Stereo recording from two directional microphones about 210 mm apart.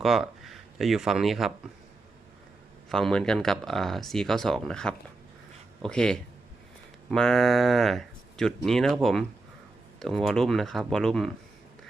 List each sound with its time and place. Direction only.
0.0 s speech: centre (ahead or behind)
2.9 s speech: 5° left (ahead or behind)